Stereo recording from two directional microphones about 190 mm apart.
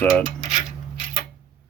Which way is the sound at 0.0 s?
Centre (ahead or behind).